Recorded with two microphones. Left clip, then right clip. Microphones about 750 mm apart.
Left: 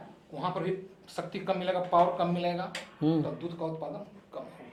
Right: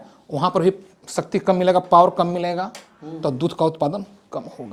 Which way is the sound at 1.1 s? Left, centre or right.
Right.